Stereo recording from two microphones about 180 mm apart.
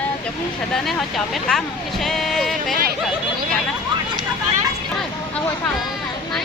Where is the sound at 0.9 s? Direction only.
Centre (ahead or behind).